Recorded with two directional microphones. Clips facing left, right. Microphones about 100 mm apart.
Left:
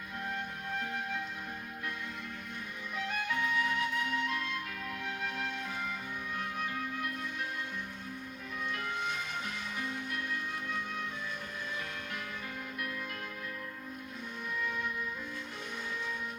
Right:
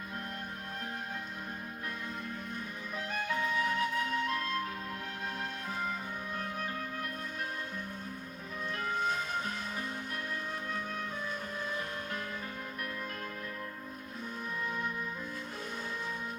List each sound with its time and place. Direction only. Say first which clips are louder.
2.9 s music: even; 35° right (ahead or behind)
6.3 s music: left 1 dB; 40° right (ahead or behind)
8.7 s music: right 5 dB; 35° right (ahead or behind)